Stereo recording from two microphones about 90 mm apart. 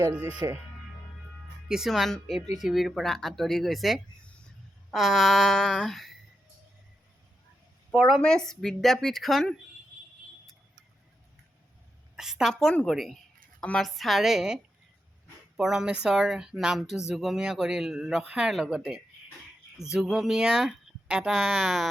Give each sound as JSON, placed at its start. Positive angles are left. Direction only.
{"t": 0.4, "sound": "speech", "side_deg": -40}
{"t": 1.6, "sound": "speech", "side_deg": -5}
{"t": 7.9, "sound": "speech", "side_deg": 5}
{"t": 12.1, "sound": "a woman's voice", "side_deg": -5}
{"t": 12.5, "sound": "speech", "side_deg": 10}